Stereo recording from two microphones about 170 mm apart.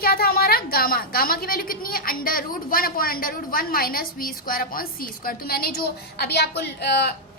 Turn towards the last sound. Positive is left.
turn(degrees=80)